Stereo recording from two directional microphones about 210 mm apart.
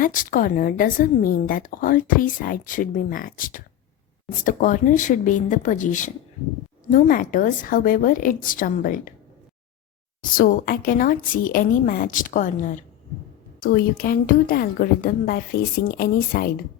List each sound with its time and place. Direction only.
0.0 s a woman's voice: 40° left (ahead or behind)
10.2 s a woman's voice: 40° left (ahead or behind)